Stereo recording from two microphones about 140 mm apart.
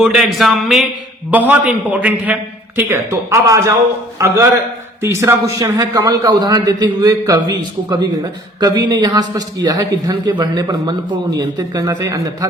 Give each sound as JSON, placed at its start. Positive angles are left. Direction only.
{"t": 0.0, "sound": "speech", "side_deg": -5}
{"t": 1.3, "sound": "a man's voice", "side_deg": -10}